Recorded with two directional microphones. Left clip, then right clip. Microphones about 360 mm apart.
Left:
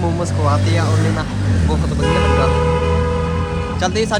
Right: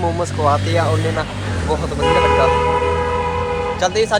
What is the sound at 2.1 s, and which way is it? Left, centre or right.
Music, right.